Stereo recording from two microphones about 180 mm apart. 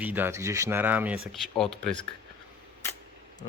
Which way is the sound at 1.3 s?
Centre (ahead or behind).